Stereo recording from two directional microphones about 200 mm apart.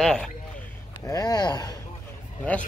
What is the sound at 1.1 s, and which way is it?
Speech, 20° left (ahead or behind).